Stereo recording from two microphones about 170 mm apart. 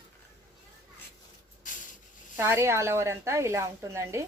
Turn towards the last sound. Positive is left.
turn(degrees=-15)  # may be behind; listen again after turning